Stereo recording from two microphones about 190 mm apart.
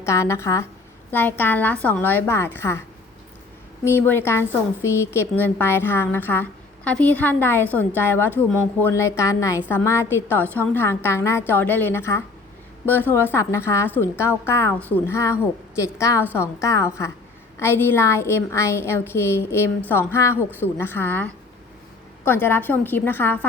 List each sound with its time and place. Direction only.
0.0 s a woman's voice: 15° left (ahead or behind)
3.8 s a woman's voice: 10° left (ahead or behind)